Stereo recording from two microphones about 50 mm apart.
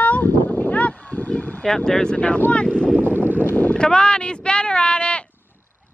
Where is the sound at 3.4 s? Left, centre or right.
Left.